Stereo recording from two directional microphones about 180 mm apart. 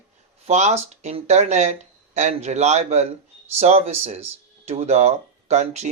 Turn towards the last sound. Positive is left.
turn(degrees=-40)  # may be behind; listen again after turning